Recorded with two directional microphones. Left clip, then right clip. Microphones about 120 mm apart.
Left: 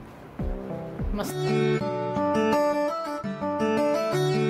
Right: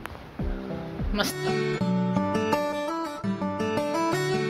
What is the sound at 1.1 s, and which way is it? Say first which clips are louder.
Music: even; centre (ahead or behind).